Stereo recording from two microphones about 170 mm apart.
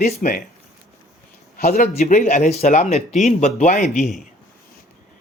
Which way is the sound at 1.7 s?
45° left (ahead or behind).